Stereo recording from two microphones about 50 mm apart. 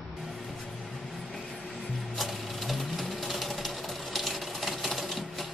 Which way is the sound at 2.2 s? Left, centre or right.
Centre.